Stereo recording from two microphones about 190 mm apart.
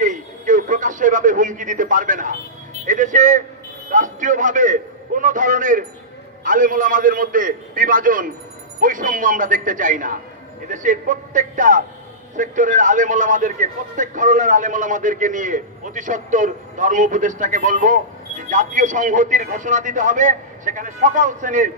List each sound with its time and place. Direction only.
0.0 s radio: 40° right (ahead or behind)
2.8 s a man's voice: 40° right (ahead or behind)